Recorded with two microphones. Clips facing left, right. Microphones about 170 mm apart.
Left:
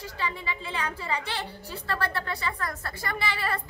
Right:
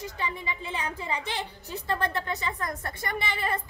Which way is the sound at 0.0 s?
15° right (ahead or behind).